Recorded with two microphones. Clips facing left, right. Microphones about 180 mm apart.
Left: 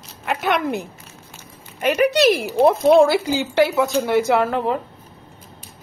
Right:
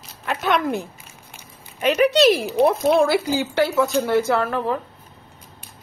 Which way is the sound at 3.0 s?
20° left (ahead or behind).